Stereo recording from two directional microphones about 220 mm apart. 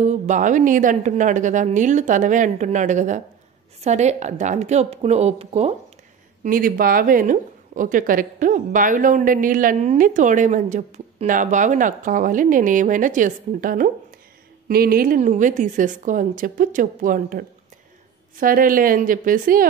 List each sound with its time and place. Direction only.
0.0 s a woman's voice: 35° right (ahead or behind)
6.4 s a woman's voice: 40° right (ahead or behind)